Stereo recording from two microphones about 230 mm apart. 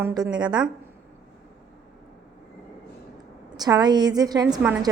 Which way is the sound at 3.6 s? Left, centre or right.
Centre.